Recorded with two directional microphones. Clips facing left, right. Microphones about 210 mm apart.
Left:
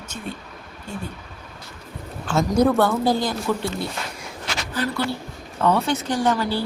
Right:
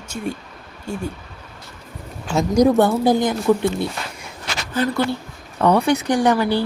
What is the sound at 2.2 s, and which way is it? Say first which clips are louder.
Speech: right 3 dB; 15° right (ahead or behind).